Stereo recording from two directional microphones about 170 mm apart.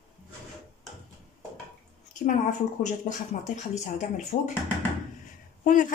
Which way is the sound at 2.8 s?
45° left (ahead or behind).